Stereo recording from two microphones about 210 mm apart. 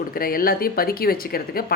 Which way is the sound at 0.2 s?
45° left (ahead or behind).